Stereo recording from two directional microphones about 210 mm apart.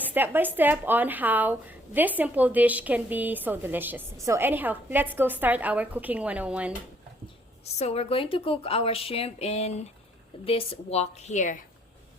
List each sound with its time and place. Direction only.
0.1 s speech: 10° right (ahead or behind)
7.8 s a woman's voice: 30° left (ahead or behind)